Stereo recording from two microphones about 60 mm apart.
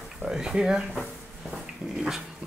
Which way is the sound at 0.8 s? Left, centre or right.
Centre.